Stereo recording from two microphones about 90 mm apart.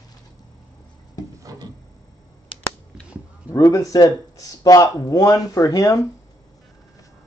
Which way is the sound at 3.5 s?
40° left (ahead or behind).